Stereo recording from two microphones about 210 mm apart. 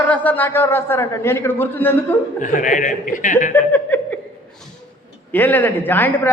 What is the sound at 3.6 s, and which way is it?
Speech, 10° left (ahead or behind).